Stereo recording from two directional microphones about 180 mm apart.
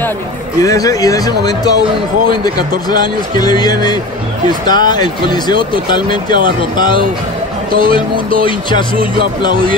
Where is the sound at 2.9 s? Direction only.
20° left (ahead or behind).